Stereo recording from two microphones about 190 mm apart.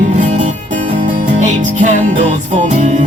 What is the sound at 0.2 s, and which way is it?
Music, 40° right (ahead or behind).